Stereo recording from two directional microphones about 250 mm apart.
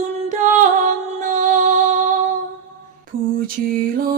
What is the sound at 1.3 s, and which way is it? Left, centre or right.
Music, right.